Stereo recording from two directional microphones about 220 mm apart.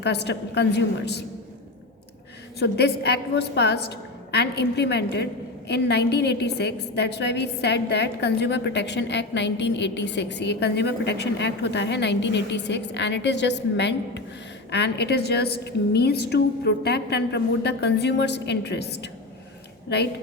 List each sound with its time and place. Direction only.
0.0 s a woman's voice: 50° left (ahead or behind)
2.6 s a woman's voice: 50° left (ahead or behind)